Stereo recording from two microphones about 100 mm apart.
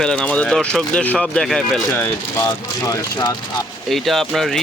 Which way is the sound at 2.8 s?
35° left (ahead or behind).